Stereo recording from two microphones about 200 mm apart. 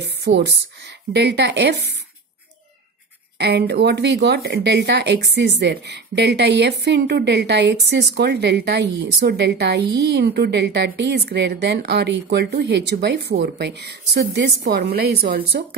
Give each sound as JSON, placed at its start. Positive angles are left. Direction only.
{"t": 0.0, "sound": "speech", "side_deg": -60}
{"t": 3.3, "sound": "speech", "side_deg": -55}